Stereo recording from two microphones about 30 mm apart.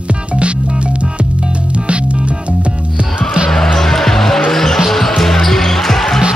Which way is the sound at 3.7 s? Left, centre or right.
Centre.